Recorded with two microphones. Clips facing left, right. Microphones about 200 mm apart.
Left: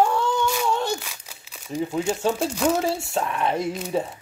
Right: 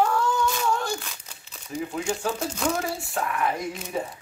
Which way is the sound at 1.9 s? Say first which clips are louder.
Left 5 dB; 25° left (ahead or behind).